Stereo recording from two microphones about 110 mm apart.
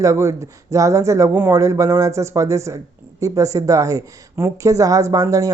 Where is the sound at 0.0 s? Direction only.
25° right (ahead or behind).